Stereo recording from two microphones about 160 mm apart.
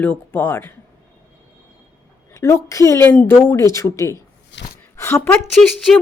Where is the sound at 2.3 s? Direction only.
15° left (ahead or behind).